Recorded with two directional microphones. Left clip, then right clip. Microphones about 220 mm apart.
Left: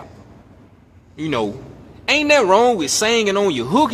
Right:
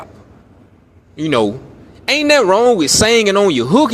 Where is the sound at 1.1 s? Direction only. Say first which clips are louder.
Right 6 dB; 20° right (ahead or behind).